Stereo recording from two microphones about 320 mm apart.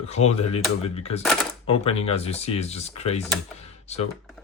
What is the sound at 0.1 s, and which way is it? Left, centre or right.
Speech, centre.